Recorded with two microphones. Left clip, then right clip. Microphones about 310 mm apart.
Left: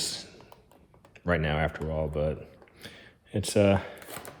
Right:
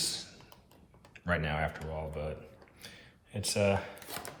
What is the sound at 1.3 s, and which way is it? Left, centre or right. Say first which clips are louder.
Speech: left 5 dB; left.